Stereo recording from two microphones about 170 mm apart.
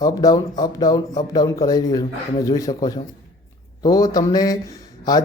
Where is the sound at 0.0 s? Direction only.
20° left (ahead or behind).